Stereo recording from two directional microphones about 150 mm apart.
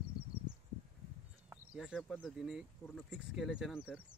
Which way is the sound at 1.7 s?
5° right (ahead or behind).